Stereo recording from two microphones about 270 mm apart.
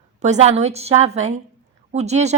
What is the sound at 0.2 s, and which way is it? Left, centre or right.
Speech, right.